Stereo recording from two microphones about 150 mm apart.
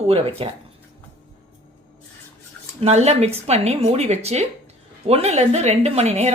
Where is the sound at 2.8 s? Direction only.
45° right (ahead or behind).